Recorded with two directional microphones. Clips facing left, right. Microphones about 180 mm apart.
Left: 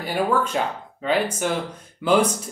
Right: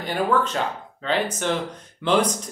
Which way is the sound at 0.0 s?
10° left (ahead or behind).